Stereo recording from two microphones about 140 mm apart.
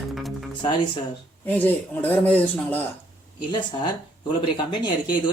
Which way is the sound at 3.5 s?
35° left (ahead or behind).